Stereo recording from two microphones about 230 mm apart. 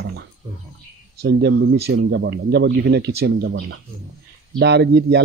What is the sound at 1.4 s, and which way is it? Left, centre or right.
Speech, right.